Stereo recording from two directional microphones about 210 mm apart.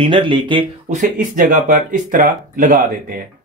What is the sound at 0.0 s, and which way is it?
Speech, 25° right (ahead or behind).